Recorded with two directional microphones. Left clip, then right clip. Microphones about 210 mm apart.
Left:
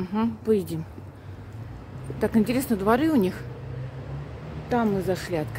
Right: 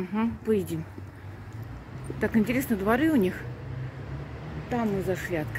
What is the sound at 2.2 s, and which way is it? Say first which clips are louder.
A woman's voice: left 2 dB; 10° left (ahead or behind).